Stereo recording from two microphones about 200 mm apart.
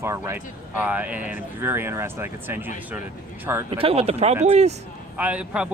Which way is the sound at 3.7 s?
30° right (ahead or behind).